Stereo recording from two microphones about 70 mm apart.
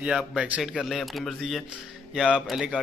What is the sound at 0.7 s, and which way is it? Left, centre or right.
Speech, centre.